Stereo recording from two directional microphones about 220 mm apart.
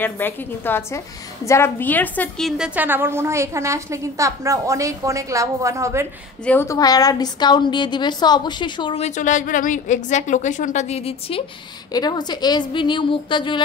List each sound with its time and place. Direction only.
0.0 s a woman's voice: 10° left (ahead or behind); by 6.0 s 15° right (ahead or behind)
6.4 s a woman's voice: 10° left (ahead or behind)